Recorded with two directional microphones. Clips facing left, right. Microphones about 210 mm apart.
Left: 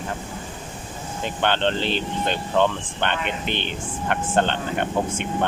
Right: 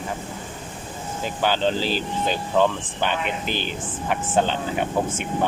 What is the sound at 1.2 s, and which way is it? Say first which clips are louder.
Speech: even; 5° right (ahead or behind).